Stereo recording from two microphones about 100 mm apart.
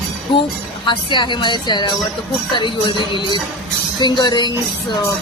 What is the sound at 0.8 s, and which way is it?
A woman's voice, 50° left (ahead or behind).